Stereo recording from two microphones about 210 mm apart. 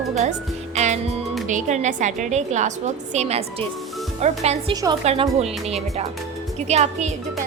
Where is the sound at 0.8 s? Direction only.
30° right (ahead or behind).